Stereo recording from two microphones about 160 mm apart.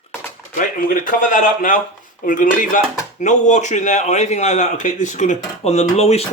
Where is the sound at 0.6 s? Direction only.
60° left (ahead or behind).